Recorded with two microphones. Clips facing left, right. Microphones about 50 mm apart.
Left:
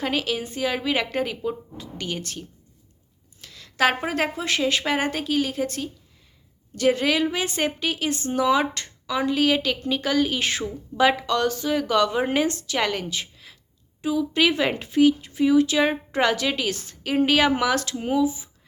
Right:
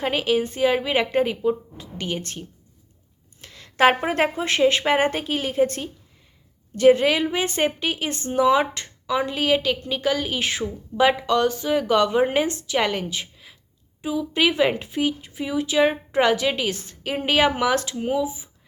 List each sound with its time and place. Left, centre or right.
0.0 s a woman's voice: right
2.2 s a woman's voice: right
6.7 s a woman's voice: centre